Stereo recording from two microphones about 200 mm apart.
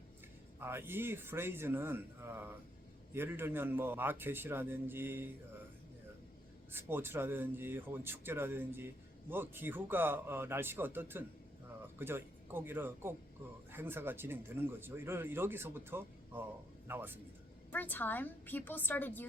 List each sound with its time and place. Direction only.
0.6 s speech: 10° right (ahead or behind)
6.7 s speech: 10° right (ahead or behind)
17.7 s a woman's voice: 10° left (ahead or behind)